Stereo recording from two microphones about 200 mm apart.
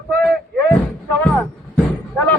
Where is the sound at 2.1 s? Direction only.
10° left (ahead or behind).